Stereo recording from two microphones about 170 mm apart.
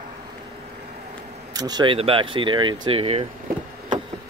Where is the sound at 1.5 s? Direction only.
20° right (ahead or behind).